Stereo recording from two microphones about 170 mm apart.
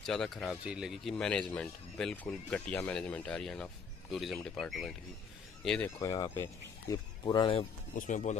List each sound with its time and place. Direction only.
0.0 s speech: centre (ahead or behind)
5.9 s speech: 20° left (ahead or behind)
7.9 s speech: 45° left (ahead or behind)